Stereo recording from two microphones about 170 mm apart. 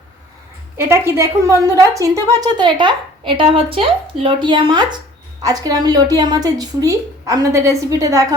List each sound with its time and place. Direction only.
0.8 s a woman's voice: 15° right (ahead or behind)